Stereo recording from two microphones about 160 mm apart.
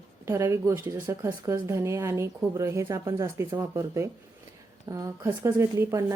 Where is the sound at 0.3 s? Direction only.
15° right (ahead or behind).